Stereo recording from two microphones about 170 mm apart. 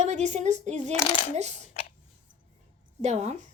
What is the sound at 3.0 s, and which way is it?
Speech, 40° right (ahead or behind).